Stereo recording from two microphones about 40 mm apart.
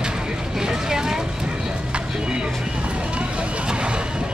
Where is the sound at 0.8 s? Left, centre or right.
Centre.